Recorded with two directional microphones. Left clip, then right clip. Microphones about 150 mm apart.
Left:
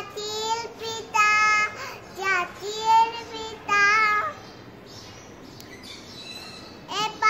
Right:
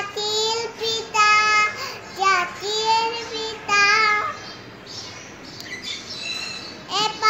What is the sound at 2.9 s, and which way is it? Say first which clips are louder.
Child singing: left 2 dB; 10° left (ahead or behind).